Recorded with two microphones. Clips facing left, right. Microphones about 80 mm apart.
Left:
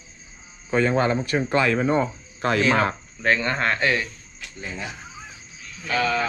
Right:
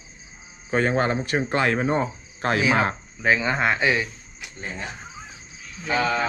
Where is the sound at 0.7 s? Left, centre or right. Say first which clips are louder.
Left 1 dB; right.